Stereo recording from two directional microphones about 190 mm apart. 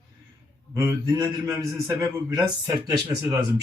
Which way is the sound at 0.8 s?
15° right (ahead or behind).